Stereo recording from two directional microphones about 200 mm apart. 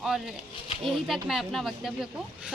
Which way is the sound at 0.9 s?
Centre (ahead or behind).